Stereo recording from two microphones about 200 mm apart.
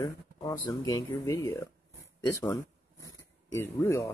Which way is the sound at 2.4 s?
15° left (ahead or behind).